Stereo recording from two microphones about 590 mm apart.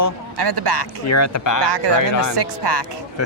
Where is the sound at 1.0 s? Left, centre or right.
Left.